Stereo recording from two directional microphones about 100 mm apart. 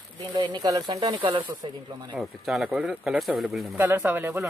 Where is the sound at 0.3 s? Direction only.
50° right (ahead or behind).